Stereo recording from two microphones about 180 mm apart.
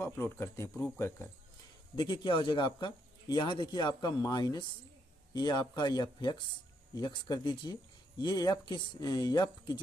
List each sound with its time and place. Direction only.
0.0 s speech: 15° left (ahead or behind)
2.0 s speech: 25° left (ahead or behind)